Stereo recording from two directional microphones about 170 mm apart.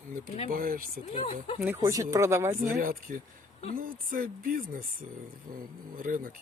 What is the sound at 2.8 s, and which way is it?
Speech, 55° right (ahead or behind).